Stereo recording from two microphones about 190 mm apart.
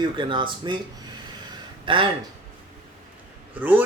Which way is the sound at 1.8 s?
25° right (ahead or behind).